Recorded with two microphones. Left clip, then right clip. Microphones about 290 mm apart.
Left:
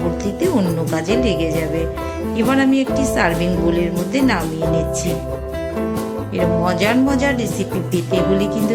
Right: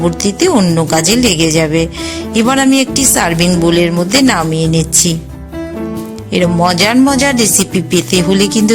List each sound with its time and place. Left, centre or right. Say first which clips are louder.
0.3 s speech: right 8 dB; right
6.3 s speech: right 7 dB; right